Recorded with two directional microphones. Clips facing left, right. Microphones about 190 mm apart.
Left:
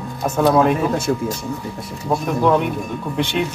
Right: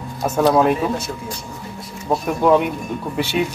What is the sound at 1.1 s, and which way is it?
Speech, 50° left (ahead or behind).